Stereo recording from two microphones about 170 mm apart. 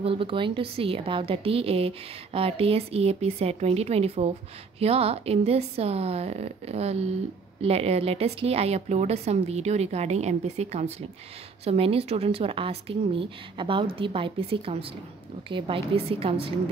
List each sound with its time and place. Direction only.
0.0 s a woman's voice: 30° right (ahead or behind)